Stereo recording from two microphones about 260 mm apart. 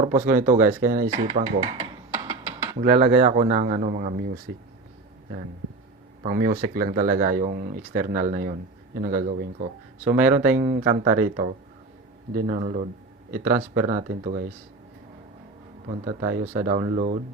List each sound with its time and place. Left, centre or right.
0.0 s speech: right
1.2 s speech: centre; by 4.3 s right
6.2 s speech: right
10.2 s speech: centre
10.8 s speech: right
16.6 s speech: right